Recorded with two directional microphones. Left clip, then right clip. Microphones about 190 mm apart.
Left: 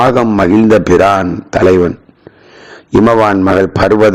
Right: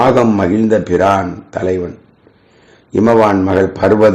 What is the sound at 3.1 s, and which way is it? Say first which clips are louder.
A man's voice: even; 40° left (ahead or behind).